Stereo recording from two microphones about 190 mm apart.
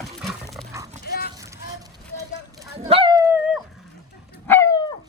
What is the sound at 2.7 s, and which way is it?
Dog, 30° right (ahead or behind).